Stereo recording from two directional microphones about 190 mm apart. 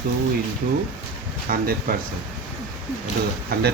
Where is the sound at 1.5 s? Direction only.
50° right (ahead or behind).